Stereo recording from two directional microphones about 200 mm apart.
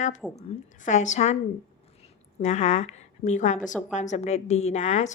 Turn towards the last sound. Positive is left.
turn(degrees=35)  # may be behind; listen again after turning